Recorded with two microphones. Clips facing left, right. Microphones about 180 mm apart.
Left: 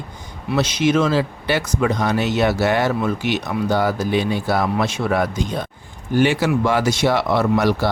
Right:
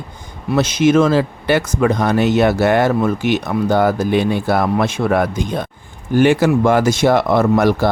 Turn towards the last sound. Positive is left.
turn(degrees=-50)  # may be behind; listen again after turning